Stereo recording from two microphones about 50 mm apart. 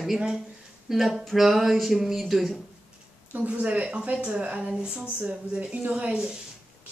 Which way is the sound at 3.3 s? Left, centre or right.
Right.